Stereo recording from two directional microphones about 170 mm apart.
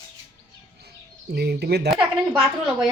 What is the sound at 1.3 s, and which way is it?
Speech, 70° right (ahead or behind).